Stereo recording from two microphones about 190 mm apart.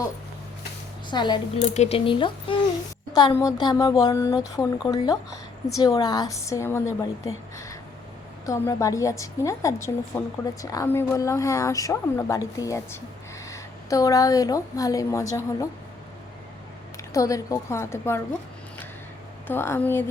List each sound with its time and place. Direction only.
1.1 s speech: 25° left (ahead or behind)
1.6 s a woman's voice: 35° left (ahead or behind); by 7.1 s 15° left (ahead or behind)
7.5 s a sound: 15° left (ahead or behind)
8.4 s a woman's voice: 15° left (ahead or behind)
17.2 s a woman's voice: 15° left (ahead or behind)
19.5 s a woman's voice: 10° left (ahead or behind)